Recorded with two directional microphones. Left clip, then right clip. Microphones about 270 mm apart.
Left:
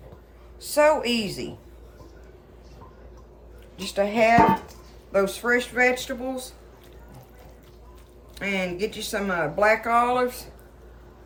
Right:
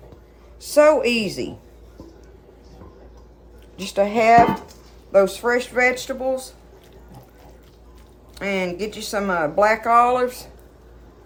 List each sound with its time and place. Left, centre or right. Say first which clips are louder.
0.6 s a woman's voice: right 5 dB; right
3.8 s a woman's voice: right 3 dB; right
8.4 s speech: right 3 dB; centre